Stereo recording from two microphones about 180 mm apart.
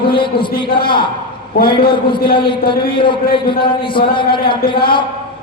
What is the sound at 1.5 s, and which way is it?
Speech, 55° left (ahead or behind).